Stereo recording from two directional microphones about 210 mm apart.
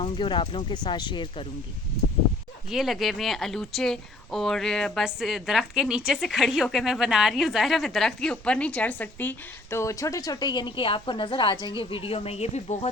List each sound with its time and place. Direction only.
0.0 s speech: 25° left (ahead or behind)
2.6 s a woman's voice: centre (ahead or behind); by 12.9 s 30° left (ahead or behind)